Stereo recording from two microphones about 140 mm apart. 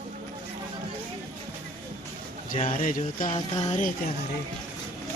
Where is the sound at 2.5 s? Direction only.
70° left (ahead or behind).